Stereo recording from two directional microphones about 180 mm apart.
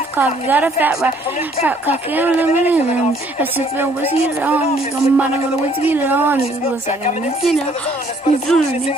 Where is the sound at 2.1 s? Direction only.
10° right (ahead or behind).